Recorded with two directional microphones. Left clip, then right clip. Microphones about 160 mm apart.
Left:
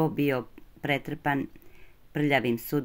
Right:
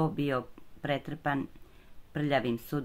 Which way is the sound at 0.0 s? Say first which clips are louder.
Left 4 dB; 10° left (ahead or behind).